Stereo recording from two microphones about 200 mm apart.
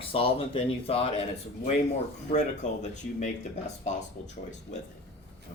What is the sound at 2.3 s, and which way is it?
Speech, 35° left (ahead or behind).